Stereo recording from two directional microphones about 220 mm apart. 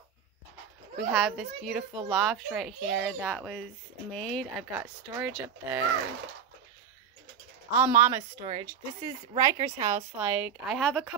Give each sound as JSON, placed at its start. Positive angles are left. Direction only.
{"t": 1.1, "sound": "a child's voice", "side_deg": -5}
{"t": 4.7, "sound": "speech", "side_deg": -10}
{"t": 7.7, "sound": "a child's voice", "side_deg": -10}